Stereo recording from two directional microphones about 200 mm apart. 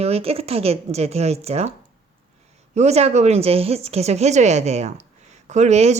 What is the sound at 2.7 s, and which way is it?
Speech, 35° right (ahead or behind).